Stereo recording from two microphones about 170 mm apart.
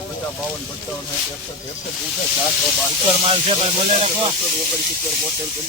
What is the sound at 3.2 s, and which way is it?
Speech, 35° right (ahead or behind).